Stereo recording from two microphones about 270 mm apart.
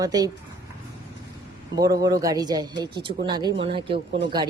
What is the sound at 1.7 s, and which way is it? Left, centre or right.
Speech, centre.